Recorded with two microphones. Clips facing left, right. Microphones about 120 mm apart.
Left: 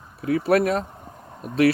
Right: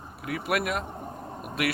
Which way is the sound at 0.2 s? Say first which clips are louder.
Left 9 dB; 30° left (ahead or behind).